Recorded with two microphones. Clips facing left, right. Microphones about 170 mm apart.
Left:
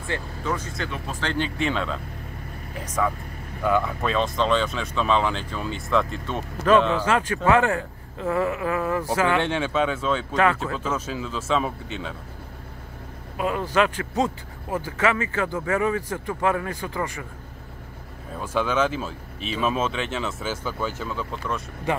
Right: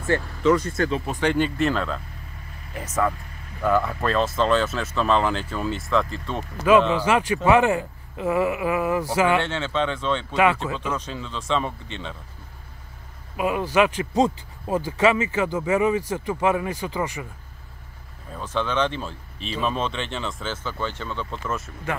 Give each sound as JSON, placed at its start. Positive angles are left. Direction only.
{"t": 0.4, "sound": "speech", "side_deg": -90}
{"t": 1.2, "sound": "speech", "side_deg": -10}
{"t": 7.1, "sound": "speech", "side_deg": -15}
{"t": 9.4, "sound": "speech", "side_deg": 15}
{"t": 10.3, "sound": "speech", "side_deg": -10}
{"t": 10.9, "sound": "speech", "side_deg": 5}
{"t": 13.4, "sound": "speech", "side_deg": -15}
{"t": 18.4, "sound": "speech", "side_deg": 10}